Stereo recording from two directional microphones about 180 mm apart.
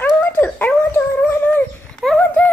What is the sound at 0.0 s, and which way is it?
Dog, 10° left (ahead or behind).